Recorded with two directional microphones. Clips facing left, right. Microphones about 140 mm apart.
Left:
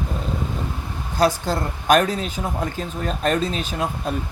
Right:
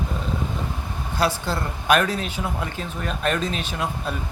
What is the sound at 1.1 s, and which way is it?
Speech, 45° left (ahead or behind).